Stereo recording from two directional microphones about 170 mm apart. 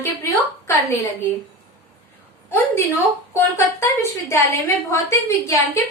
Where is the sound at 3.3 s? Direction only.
15° left (ahead or behind).